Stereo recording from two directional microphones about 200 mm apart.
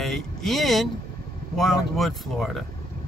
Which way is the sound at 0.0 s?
Centre (ahead or behind).